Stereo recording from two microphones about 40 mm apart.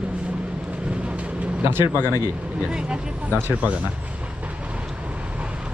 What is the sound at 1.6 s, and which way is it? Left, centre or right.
Speech, right.